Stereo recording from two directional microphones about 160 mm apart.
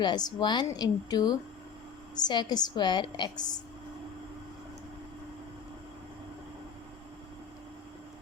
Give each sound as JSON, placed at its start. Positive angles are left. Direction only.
{"t": 0.0, "sound": "a woman's voice", "side_deg": 25}